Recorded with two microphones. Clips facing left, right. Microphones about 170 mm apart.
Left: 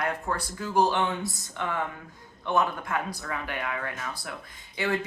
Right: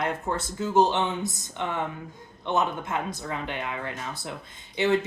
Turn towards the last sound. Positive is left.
turn(degrees=-25)  # may be behind; listen again after turning